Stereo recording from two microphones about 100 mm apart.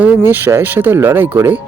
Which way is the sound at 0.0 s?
20° right (ahead or behind).